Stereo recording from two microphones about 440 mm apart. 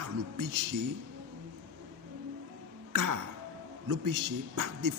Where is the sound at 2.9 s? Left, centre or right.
Right.